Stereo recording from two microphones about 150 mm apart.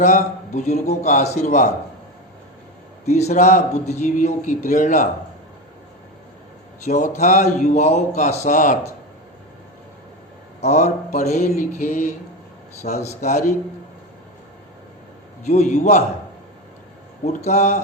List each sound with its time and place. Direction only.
0.0 s a man's voice: 55° left (ahead or behind)
3.1 s a man's voice: 45° left (ahead or behind)
6.8 s a man's voice: 55° left (ahead or behind)
10.6 s a man's voice: 50° left (ahead or behind)
15.4 s a man's voice: 50° left (ahead or behind)
17.3 s a man's voice: 50° left (ahead or behind)